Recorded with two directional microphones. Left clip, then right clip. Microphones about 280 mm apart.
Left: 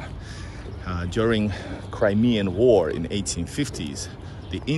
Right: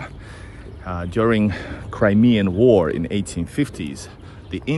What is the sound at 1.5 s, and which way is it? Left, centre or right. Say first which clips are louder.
Speech: right 4 dB; right.